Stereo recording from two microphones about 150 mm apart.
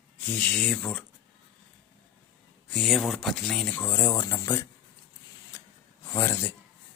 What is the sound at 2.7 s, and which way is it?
Speech, centre (ahead or behind).